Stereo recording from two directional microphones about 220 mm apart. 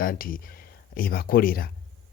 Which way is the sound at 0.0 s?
40° left (ahead or behind).